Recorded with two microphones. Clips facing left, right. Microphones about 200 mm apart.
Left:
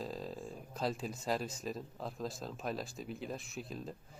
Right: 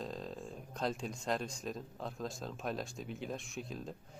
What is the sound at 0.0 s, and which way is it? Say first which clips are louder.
Speech: left 1 dB; 5° left (ahead or behind).